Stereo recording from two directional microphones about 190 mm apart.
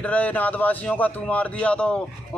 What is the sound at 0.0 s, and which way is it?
Speech, 10° left (ahead or behind).